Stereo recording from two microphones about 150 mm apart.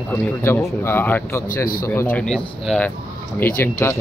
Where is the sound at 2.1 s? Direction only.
5° left (ahead or behind).